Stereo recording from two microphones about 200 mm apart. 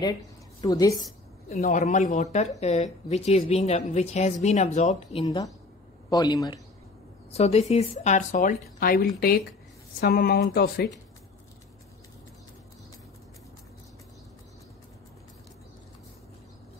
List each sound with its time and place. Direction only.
0.6 s a woman's voice: 15° left (ahead or behind)
1.6 s a woman's voice: 35° left (ahead or behind)
6.0 s a man's voice: 20° left (ahead or behind)
7.3 s a woman's voice: 30° left (ahead or behind); by 10.9 s 50° left (ahead or behind)